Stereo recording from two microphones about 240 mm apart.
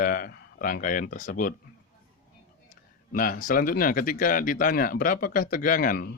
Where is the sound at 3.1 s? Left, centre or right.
Left.